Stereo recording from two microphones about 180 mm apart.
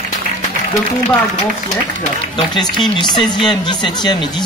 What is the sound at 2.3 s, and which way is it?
Speech, 25° left (ahead or behind).